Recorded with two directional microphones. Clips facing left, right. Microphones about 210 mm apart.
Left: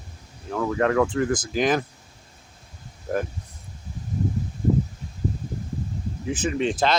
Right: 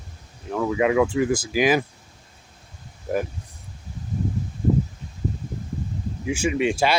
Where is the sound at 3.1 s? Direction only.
5° right (ahead or behind).